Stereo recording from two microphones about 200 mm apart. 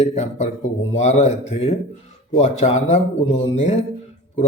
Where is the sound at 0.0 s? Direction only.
35° left (ahead or behind).